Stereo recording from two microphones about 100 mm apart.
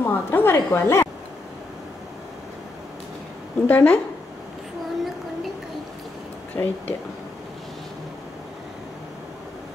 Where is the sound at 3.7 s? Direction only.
20° left (ahead or behind).